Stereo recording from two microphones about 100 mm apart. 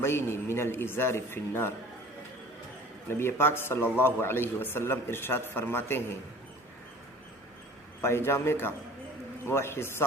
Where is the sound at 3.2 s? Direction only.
25° left (ahead or behind).